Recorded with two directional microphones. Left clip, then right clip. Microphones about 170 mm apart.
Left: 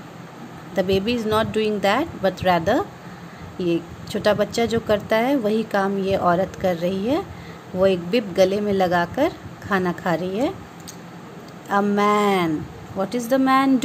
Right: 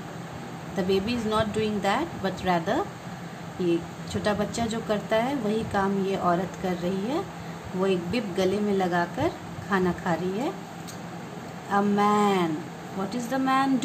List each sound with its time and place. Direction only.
0.7 s speech: 55° left (ahead or behind)
11.7 s speech: 55° left (ahead or behind)